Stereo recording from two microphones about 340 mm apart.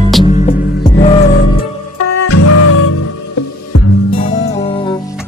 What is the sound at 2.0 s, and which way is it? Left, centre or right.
Music, left.